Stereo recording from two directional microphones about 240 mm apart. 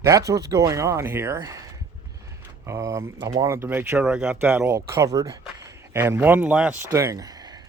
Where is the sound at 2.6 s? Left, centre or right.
Centre.